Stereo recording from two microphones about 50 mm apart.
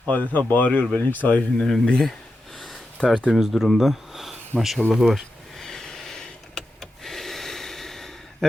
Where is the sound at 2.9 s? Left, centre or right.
Centre.